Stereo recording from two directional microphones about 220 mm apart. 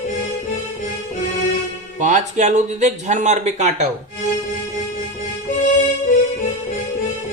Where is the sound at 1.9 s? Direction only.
35° right (ahead or behind).